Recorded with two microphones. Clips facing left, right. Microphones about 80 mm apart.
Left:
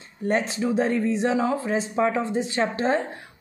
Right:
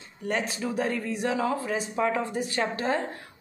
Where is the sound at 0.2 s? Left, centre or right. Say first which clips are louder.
Left 5 dB; left.